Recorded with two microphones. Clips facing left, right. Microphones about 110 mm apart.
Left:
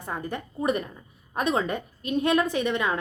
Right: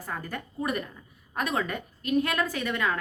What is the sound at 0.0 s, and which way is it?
A woman's voice, 20° left (ahead or behind).